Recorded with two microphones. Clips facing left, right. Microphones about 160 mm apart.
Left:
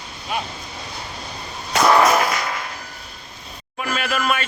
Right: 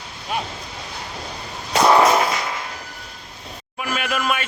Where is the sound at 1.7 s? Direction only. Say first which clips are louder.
Right 1 dB; 25° right (ahead or behind).